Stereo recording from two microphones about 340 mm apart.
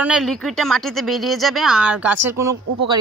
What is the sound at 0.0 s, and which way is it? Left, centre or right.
Speech, centre.